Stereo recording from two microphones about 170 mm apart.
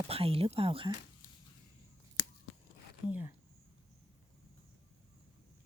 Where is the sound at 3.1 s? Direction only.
10° right (ahead or behind).